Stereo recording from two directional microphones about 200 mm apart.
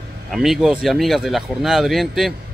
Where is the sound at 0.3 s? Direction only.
Centre (ahead or behind).